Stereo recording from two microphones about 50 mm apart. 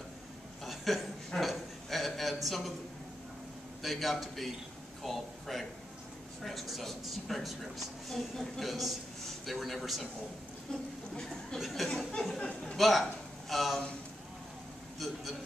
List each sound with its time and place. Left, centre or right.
0.7 s chuckle: centre
1.3 s a sound: centre
3.8 s a woman's voice: centre
10.7 s speech: centre
11.5 s a woman's voice: centre
12.4 s a man's voice: left
12.7 s a man's voice: centre